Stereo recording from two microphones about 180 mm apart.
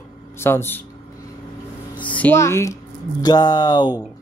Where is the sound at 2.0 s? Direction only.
10° left (ahead or behind).